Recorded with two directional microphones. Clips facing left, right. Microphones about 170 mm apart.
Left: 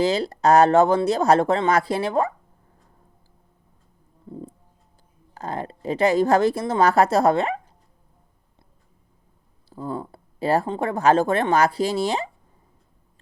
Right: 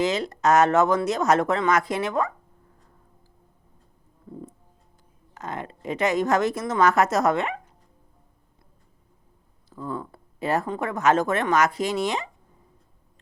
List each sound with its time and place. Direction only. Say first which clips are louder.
0.0 s a woman's voice: left 3 dB; 35° left (ahead or behind)
4.3 s a sound: left 3 dB; 30° left (ahead or behind)
5.3 s a woman's voice: left 4 dB; 35° left (ahead or behind)
9.6 s a woman's voice: left 2 dB; 30° left (ahead or behind)